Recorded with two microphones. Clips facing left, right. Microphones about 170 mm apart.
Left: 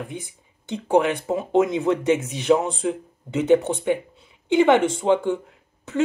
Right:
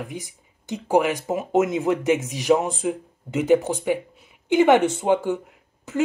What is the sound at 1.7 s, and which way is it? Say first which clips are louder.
Speech: left 1 dB; centre (ahead or behind).